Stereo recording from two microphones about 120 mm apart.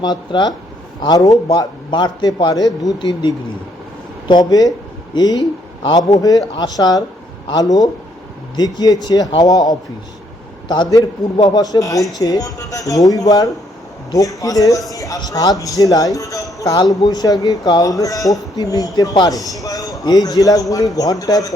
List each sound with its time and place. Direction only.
0.0 s a man's voice: 35° left (ahead or behind)